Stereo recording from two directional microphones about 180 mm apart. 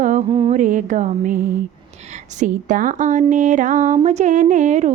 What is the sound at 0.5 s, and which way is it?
Speech, 45° right (ahead or behind).